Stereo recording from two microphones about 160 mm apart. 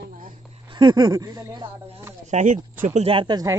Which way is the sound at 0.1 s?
55° right (ahead or behind).